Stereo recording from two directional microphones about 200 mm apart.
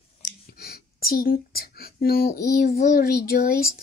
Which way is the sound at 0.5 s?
50° left (ahead or behind).